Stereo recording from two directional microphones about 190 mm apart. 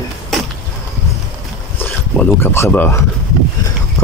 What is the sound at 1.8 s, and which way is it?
Speech, 10° left (ahead or behind).